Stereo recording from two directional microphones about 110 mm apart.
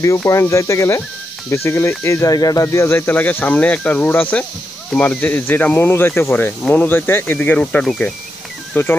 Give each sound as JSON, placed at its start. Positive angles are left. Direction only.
{"t": 0.0, "sound": "speech", "side_deg": 30}